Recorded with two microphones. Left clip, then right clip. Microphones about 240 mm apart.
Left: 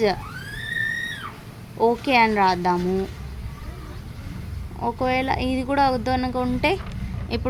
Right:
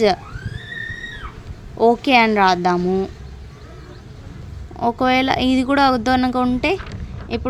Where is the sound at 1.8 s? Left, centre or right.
Centre.